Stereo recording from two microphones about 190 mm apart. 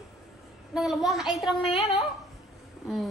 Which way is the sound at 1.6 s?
30° left (ahead or behind).